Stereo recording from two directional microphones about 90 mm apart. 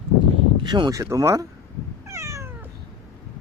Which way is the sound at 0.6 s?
55° right (ahead or behind).